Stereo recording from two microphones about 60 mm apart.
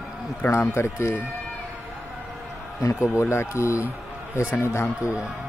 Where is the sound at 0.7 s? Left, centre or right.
Left.